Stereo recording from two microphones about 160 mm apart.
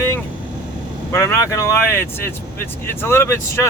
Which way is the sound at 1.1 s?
15° left (ahead or behind).